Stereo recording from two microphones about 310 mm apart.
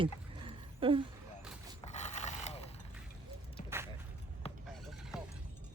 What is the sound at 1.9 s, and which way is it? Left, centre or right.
Vehicle, left.